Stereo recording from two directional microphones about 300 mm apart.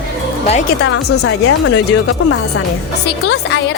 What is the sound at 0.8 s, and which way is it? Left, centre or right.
Speech, left.